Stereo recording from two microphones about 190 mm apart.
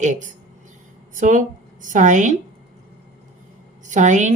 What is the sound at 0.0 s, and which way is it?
A woman's voice, 40° right (ahead or behind).